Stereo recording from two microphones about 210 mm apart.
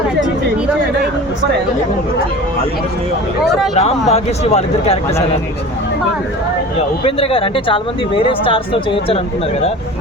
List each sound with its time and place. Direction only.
3.8 s speech: 30° left (ahead or behind)
7.0 s speech: 25° left (ahead or behind)